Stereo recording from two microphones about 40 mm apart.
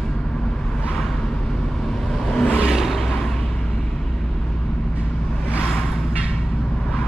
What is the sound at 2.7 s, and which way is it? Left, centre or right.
Vehicle, centre.